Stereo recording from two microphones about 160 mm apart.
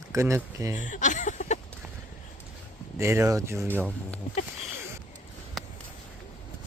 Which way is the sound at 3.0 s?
15° right (ahead or behind).